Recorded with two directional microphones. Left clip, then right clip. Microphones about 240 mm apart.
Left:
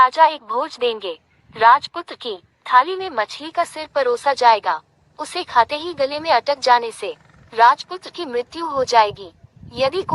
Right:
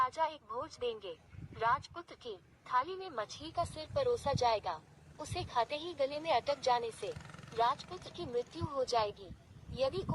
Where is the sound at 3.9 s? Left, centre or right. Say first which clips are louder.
Left 15 dB; left.